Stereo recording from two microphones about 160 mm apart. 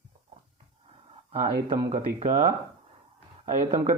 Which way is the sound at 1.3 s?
40° right (ahead or behind).